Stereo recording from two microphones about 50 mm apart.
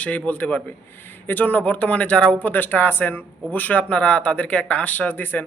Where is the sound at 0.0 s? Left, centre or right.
Left.